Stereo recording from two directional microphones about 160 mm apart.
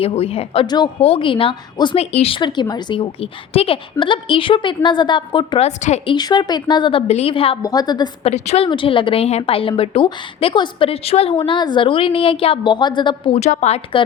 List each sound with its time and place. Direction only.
0.0 s a woman's voice: 40° left (ahead or behind)
5.6 s a woman's voice: 45° left (ahead or behind)
6.1 s a woman's voice: 25° left (ahead or behind)
7.6 s a woman's voice: 25° left (ahead or behind)
8.2 s a woman's voice: 40° left (ahead or behind)